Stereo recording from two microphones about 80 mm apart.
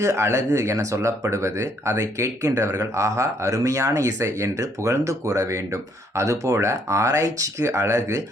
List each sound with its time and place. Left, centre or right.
0.0 s speech: right